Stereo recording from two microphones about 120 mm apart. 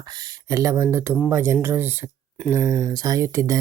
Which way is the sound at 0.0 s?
35° right (ahead or behind).